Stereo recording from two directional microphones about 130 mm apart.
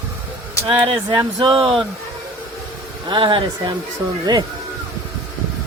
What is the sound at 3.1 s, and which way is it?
Speech, 35° right (ahead or behind).